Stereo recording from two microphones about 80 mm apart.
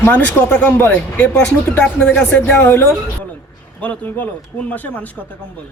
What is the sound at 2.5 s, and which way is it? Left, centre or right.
A man's voice, left.